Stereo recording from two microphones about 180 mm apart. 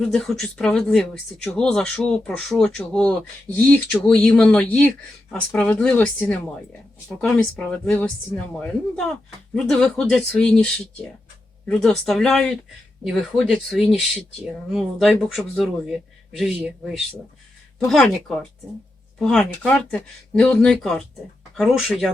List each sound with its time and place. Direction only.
0.0 s speech: 5° left (ahead or behind)